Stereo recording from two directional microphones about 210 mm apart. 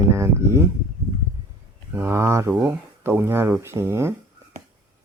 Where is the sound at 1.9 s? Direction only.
10° right (ahead or behind).